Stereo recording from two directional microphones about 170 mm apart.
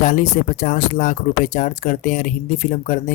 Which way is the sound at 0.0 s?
50° left (ahead or behind).